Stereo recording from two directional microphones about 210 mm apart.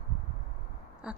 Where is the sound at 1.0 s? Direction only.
5° right (ahead or behind).